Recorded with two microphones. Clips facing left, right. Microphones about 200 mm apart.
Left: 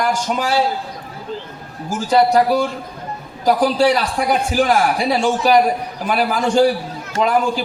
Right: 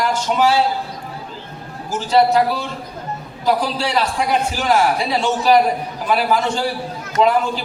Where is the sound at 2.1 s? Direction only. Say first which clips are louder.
Left 1 dB; 45° left (ahead or behind).